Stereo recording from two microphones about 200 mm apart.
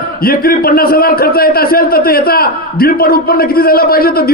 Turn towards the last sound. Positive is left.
turn(degrees=50)  # may be behind; listen again after turning